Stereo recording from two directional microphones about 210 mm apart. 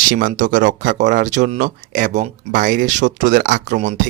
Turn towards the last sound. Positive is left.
turn(degrees=-40)  # may be behind; listen again after turning